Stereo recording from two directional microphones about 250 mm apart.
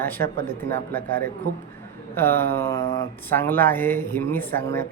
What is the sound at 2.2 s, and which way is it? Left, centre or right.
Speech, centre.